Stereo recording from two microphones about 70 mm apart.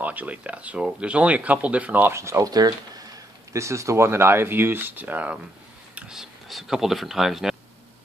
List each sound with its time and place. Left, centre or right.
0.0 s speech: right
2.0 s speech: right
2.5 s speech: right
6.0 s speech: centre